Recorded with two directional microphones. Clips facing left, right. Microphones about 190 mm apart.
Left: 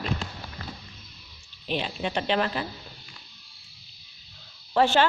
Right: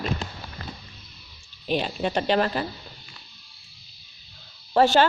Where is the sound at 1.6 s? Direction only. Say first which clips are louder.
Right 4 dB; 45° right (ahead or behind).